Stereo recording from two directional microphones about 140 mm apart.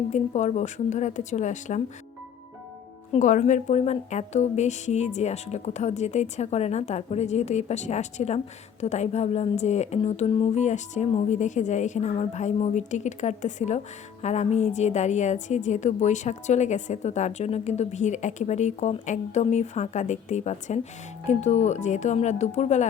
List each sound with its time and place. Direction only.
0.1 s a woman's voice: 55° left (ahead or behind)
3.1 s a woman's voice: 65° left (ahead or behind)